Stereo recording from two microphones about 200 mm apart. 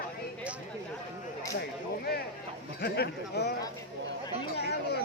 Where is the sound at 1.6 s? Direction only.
50° left (ahead or behind).